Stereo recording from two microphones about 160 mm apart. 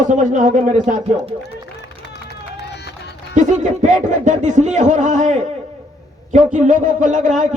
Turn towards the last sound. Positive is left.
turn(degrees=-50)  # may be behind; listen again after turning